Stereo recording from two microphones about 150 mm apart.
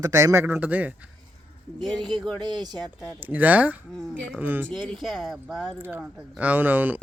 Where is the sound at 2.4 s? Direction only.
30° right (ahead or behind).